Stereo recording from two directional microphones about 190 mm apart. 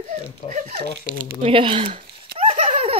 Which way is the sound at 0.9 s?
50° right (ahead or behind).